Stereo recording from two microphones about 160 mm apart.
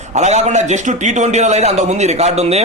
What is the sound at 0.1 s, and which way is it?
A man's voice, 45° right (ahead or behind).